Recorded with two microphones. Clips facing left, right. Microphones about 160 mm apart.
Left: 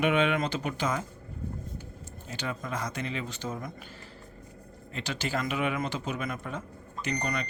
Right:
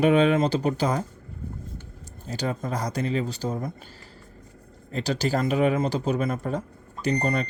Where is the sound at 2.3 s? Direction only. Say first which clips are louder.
Right 6 dB; 35° right (ahead or behind).